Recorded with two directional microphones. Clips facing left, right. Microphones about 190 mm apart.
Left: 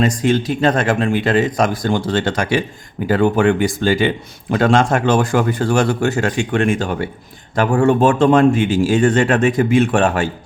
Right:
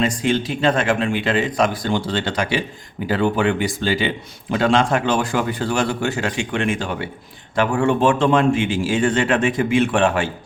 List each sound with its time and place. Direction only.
0.0 s a man's voice: 40° left (ahead or behind)